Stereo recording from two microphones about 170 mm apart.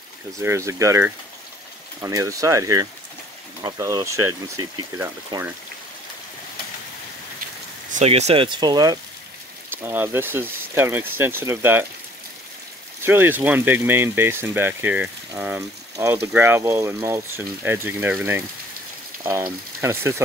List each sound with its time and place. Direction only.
0.4 s speech: 15° right (ahead or behind)
7.9 s speech: 40° right (ahead or behind); by 11.8 s 15° right (ahead or behind)
13.0 s speech: 10° right (ahead or behind)